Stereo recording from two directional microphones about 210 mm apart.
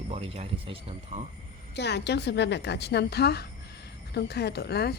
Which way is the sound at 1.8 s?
55° left (ahead or behind).